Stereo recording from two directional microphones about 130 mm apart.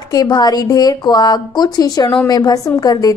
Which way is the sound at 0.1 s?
30° left (ahead or behind).